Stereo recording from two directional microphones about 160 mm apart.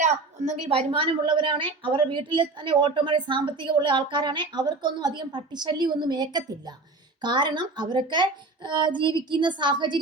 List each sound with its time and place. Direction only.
0.0 s a woman's voice: 50° right (ahead or behind); by 10.0 s 30° right (ahead or behind)